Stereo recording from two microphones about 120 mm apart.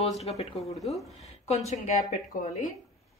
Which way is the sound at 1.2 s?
65° left (ahead or behind).